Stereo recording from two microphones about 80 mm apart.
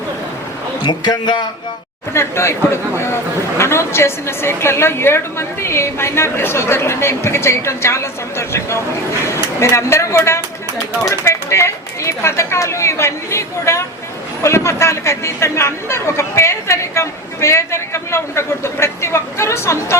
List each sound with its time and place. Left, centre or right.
0.9 s speech: left
2.1 s speech: left